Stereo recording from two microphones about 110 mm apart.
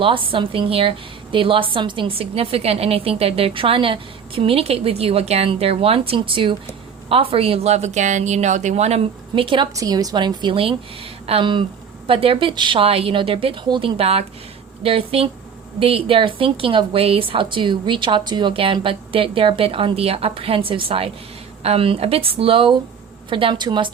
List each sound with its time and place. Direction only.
0.0 s a woman's voice: 55° right (ahead or behind); by 9.0 s 75° right (ahead or behind)
9.3 s a woman's voice: 50° right (ahead or behind)
9.7 s a woman's voice: 35° right (ahead or behind)